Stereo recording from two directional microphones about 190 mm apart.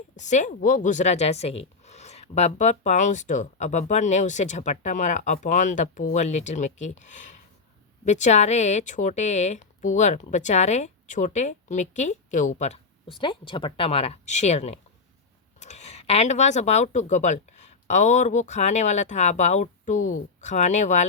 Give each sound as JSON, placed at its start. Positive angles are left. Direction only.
{"t": 0.2, "sound": "speech", "side_deg": 40}